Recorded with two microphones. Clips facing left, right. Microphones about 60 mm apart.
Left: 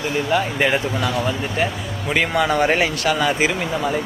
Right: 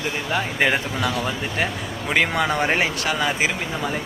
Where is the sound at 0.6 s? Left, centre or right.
Right.